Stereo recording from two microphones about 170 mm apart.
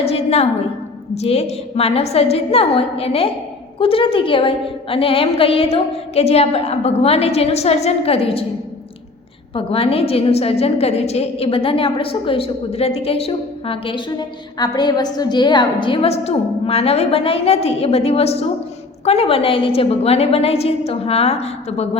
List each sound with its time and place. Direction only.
0.0 s a sound: 35° left (ahead or behind)
1.1 s a woman's voice: 40° left (ahead or behind)
9.6 s a woman's voice: 35° left (ahead or behind)